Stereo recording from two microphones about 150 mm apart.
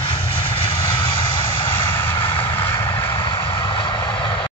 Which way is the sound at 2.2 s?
35° left (ahead or behind).